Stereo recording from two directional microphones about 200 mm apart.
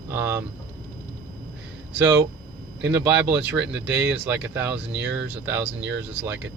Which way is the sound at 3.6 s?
60° right (ahead or behind).